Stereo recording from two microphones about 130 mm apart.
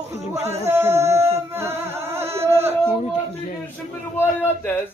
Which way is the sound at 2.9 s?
55° left (ahead or behind).